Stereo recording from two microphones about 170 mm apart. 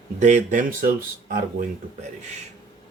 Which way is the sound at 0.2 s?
45° right (ahead or behind).